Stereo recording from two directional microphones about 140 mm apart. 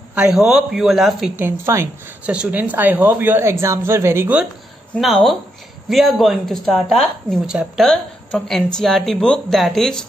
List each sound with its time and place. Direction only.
0.1 s a woman's voice: 10° right (ahead or behind)
1.3 s a woman's voice: 20° right (ahead or behind)
2.2 s speech: 10° right (ahead or behind)
5.0 s a woman's voice: centre (ahead or behind)